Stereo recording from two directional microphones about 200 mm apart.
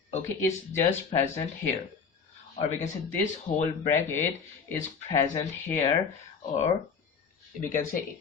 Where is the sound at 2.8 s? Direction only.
35° left (ahead or behind).